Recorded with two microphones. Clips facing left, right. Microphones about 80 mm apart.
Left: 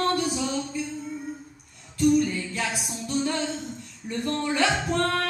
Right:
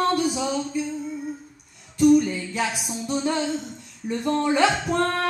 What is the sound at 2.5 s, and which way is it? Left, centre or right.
Music, centre.